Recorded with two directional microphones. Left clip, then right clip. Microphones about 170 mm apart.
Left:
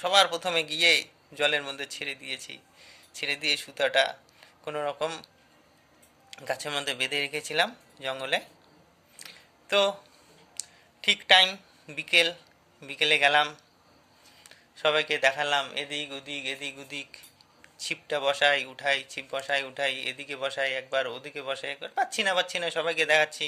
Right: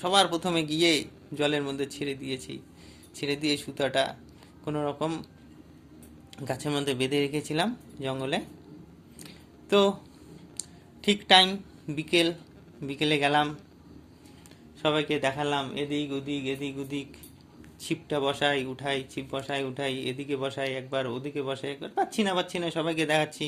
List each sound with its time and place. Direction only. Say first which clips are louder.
0.0 s speech: left 1 dB; 10° left (ahead or behind)
6.3 s speech: even; 10° left (ahead or behind)
9.1 s a sound: left 3 dB; 10° left (ahead or behind)
10.6 s speech: left 3 dB; 10° left (ahead or behind)
14.8 s a man's voice: left 2 dB; 15° left (ahead or behind)